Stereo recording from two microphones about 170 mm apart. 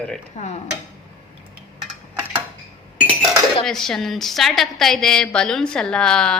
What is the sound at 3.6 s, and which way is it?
A woman's voice, 5° left (ahead or behind).